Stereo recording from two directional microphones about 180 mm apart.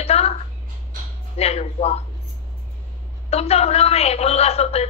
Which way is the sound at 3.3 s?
35° left (ahead or behind).